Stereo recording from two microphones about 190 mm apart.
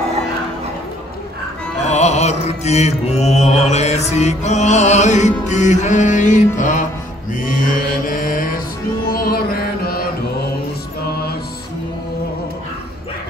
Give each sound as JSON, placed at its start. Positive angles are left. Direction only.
{"t": 1.9, "sound": "mantra", "side_deg": 35}